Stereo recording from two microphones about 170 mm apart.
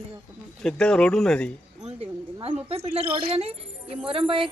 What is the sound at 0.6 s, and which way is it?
Speech, 5° left (ahead or behind).